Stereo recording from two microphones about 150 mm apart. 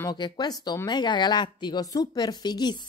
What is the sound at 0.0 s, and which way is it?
Speech, 30° left (ahead or behind).